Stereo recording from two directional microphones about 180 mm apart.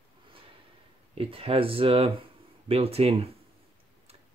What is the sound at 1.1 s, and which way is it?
Speech, 30° right (ahead or behind).